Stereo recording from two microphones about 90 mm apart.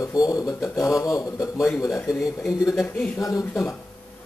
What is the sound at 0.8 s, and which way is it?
A man's voice, 40° left (ahead or behind).